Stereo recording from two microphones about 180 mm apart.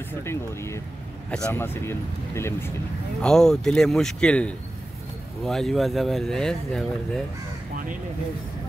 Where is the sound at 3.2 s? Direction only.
5° left (ahead or behind).